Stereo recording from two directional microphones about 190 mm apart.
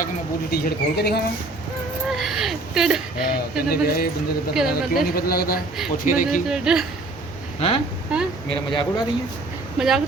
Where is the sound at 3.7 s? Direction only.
50° left (ahead or behind).